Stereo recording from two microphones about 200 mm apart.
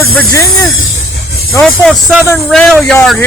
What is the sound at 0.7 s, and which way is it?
Speech, 80° left.